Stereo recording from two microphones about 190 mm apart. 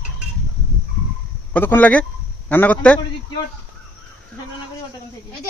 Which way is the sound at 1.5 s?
10° left (ahead or behind).